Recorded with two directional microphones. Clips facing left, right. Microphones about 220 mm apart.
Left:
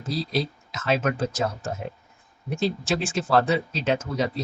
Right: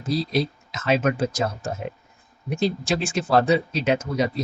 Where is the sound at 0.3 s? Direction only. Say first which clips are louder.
Right 3 dB; 15° right (ahead or behind).